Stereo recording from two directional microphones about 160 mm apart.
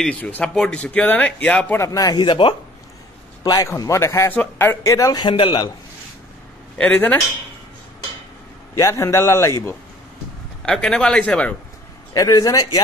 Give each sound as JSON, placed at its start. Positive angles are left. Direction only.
{"t": 0.0, "sound": "speech", "side_deg": 10}
{"t": 3.4, "sound": "speech", "side_deg": 20}
{"t": 6.8, "sound": "speech", "side_deg": 10}
{"t": 8.7, "sound": "speech", "side_deg": 20}
{"t": 10.6, "sound": "speech", "side_deg": 5}
{"t": 12.1, "sound": "speech", "side_deg": 25}